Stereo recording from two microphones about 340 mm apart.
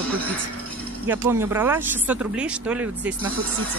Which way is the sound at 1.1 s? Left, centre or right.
Centre.